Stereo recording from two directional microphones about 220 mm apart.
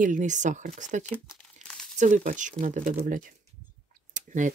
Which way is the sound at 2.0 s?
35° right (ahead or behind).